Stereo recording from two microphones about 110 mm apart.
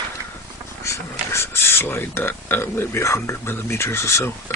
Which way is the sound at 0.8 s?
25° left (ahead or behind).